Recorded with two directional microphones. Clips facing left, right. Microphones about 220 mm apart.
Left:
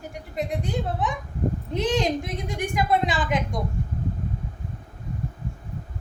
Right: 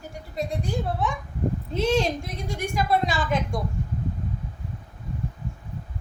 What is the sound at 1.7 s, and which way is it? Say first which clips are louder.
A woman's voice: right 1 dB; 15° left (ahead or behind).